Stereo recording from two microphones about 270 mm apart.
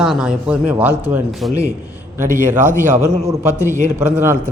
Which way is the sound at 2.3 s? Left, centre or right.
Right.